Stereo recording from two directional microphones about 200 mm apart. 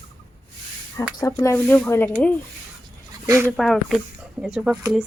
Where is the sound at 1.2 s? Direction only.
15° left (ahead or behind).